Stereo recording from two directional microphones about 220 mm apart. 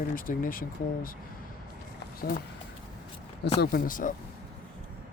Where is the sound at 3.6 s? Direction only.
45° left (ahead or behind).